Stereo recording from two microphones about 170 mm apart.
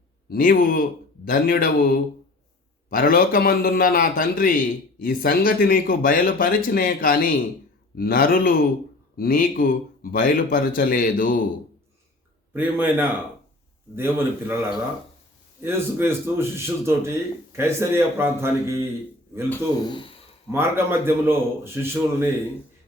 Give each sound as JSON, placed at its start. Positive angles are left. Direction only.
{"t": 0.3, "sound": "a man's voice", "side_deg": 60}
{"t": 12.5, "sound": "a man's voice", "side_deg": -10}
{"t": 15.6, "sound": "a man's voice", "side_deg": -15}
{"t": 19.8, "sound": "speech", "side_deg": 30}
{"t": 20.5, "sound": "a man's voice", "side_deg": -15}